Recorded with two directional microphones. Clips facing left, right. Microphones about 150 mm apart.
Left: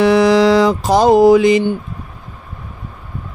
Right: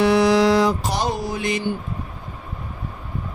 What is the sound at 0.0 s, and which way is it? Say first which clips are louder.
Music: left 5 dB; 90° left.